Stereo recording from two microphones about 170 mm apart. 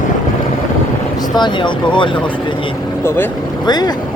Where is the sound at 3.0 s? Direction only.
10° left (ahead or behind).